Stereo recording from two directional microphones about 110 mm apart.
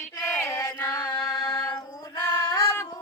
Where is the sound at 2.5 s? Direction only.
30° left (ahead or behind).